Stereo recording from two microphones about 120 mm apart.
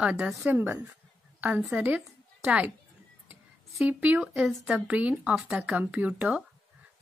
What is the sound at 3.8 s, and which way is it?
Speech, 10° right (ahead or behind).